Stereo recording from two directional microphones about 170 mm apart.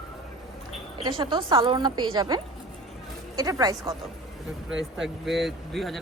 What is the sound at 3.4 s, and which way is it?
Speech, 20° right (ahead or behind).